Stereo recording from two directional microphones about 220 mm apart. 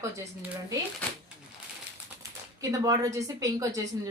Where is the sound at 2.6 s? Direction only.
15° right (ahead or behind).